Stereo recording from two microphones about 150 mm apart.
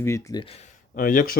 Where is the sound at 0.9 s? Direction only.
65° left (ahead or behind).